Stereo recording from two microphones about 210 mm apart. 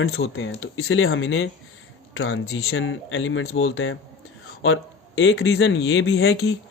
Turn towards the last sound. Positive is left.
turn(degrees=75)  # may be behind; listen again after turning